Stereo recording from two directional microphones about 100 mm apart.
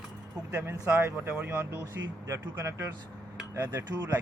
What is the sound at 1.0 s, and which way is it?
Speech, 25° right (ahead or behind).